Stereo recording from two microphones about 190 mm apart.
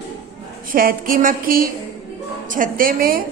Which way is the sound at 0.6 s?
45° right (ahead or behind).